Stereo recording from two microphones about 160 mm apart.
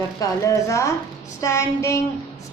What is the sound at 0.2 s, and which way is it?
A woman's voice, 20° left (ahead or behind).